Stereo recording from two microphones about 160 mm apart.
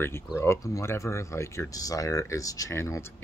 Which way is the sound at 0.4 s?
20° left (ahead or behind).